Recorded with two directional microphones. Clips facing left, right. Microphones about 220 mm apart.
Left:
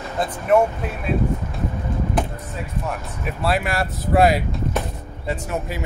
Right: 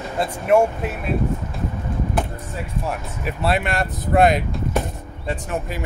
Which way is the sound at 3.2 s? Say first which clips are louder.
Right 1 dB; centre (ahead or behind).